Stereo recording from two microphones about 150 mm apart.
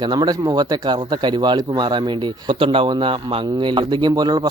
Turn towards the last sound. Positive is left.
turn(degrees=-25)  # may be behind; listen again after turning